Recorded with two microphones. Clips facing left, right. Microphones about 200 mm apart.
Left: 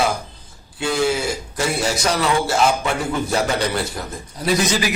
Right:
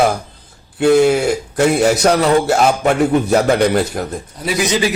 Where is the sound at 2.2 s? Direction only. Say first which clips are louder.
Right 5 dB; 45° right (ahead or behind).